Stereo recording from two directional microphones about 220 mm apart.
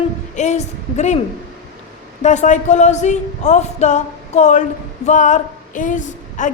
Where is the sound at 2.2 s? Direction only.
30° left (ahead or behind).